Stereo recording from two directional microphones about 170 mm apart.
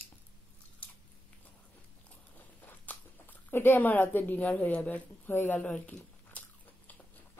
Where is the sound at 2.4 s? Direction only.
10° left (ahead or behind).